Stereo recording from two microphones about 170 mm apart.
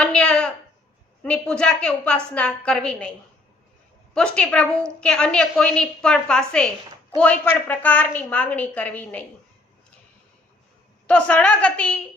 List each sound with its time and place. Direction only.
0.0 s a sound: 5° left (ahead or behind)
1.2 s a woman's voice: 5° left (ahead or behind)
7.7 s a woman's voice: 10° left (ahead or behind)
11.0 s a woman's voice: 10° left (ahead or behind)